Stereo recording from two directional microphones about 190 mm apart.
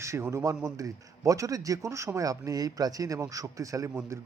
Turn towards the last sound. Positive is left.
turn(degrees=-5)  # may be behind; listen again after turning